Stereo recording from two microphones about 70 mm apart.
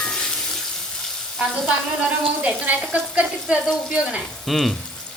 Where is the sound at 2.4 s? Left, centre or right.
Right.